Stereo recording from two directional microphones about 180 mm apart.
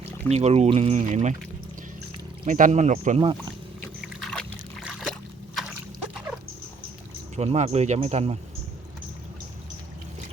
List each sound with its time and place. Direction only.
0.3 s speech: 35° right (ahead or behind)
2.5 s speech: 45° right (ahead or behind)
3.2 s speech: 30° right (ahead or behind)
4.2 s a sound: centre (ahead or behind)
7.3 s speech: 35° right (ahead or behind)